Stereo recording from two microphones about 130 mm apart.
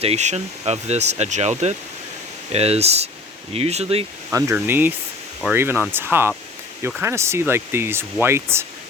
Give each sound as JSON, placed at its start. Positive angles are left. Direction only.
{"t": 0.0, "sound": "speech", "side_deg": -55}
{"t": 4.3, "sound": "speech", "side_deg": -25}